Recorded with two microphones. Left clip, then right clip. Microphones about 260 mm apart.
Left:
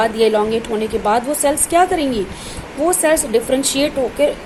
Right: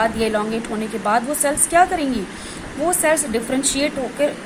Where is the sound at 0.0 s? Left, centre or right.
Centre.